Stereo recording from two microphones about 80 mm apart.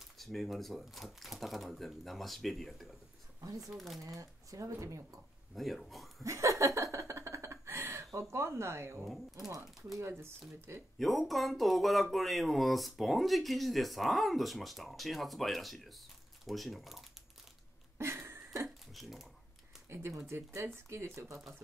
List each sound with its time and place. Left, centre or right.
0.2 s speech: centre
3.3 s speech: right
3.7 s speech: centre
4.2 s speech: right
5.5 s speech: centre
6.2 s a sound: right
8.2 s speech: right
9.0 s speech: centre
9.9 s speech: right
11.0 s speech: centre
17.9 s a sound: right
18.9 s speech: centre
19.9 s speech: right